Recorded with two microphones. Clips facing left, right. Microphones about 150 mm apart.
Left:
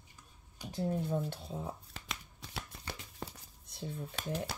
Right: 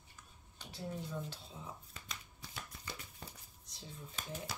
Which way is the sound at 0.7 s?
55° left (ahead or behind).